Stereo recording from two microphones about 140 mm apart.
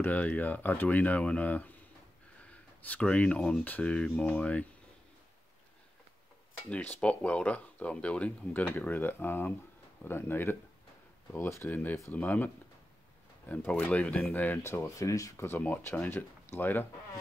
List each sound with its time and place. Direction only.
0.0 s speech: 10° left (ahead or behind)
2.8 s speech: 10° left (ahead or behind)
6.7 s speech: 10° left (ahead or behind)
13.5 s speech: 10° left (ahead or behind)